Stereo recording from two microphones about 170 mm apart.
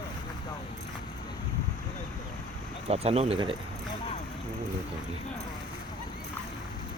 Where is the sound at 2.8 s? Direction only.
35° right (ahead or behind).